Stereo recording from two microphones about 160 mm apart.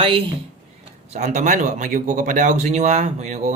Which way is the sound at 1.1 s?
45° right (ahead or behind).